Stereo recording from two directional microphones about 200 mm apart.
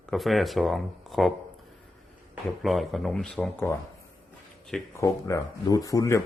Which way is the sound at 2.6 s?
Centre (ahead or behind).